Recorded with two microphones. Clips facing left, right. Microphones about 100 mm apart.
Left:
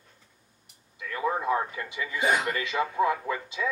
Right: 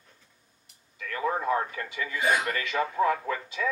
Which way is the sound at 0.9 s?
20° left (ahead or behind).